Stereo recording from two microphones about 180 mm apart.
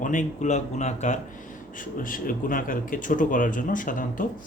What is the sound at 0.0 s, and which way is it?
Speech, 45° left (ahead or behind).